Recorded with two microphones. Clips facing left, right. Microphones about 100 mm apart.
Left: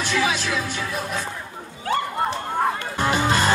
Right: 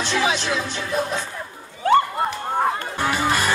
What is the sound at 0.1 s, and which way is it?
Music, 25° right (ahead or behind).